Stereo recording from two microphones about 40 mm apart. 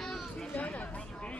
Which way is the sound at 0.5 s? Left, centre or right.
Left.